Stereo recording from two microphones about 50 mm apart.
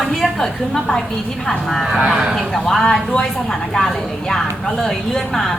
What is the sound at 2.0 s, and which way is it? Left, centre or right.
Speech, right.